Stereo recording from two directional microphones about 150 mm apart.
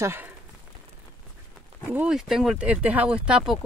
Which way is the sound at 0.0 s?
15° right (ahead or behind).